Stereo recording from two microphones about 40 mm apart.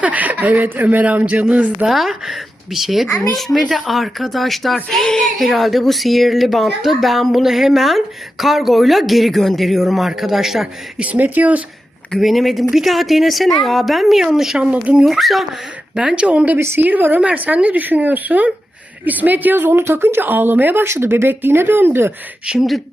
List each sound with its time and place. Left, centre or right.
0.0 s speech: right
1.0 s a man's voice: right
1.9 s speech: centre
5.2 s a man's voice: centre
10.9 s a man's voice: right
12.1 s a man's voice: centre
14.6 s a man's voice: right
15.0 s speech: centre
16.0 s speech: right
16.6 s a woman's voice: right
16.8 s speech: right
19.5 s speech: right
20.8 s speech: right
22.5 s speech: right